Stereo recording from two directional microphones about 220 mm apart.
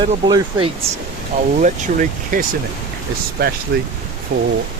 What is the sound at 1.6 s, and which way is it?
Speech, 40° right (ahead or behind).